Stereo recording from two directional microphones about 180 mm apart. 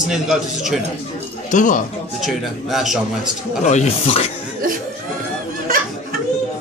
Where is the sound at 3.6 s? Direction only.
40° left (ahead or behind).